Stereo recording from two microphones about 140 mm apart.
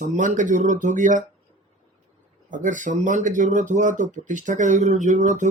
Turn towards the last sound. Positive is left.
turn(degrees=-60)  # may be behind; listen again after turning